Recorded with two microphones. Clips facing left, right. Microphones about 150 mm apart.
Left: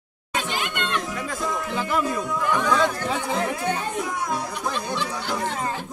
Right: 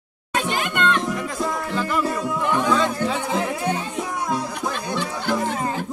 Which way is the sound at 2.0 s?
30° right (ahead or behind).